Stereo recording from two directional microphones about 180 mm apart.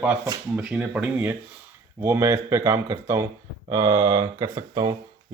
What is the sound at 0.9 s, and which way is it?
A man's voice, 10° right (ahead or behind).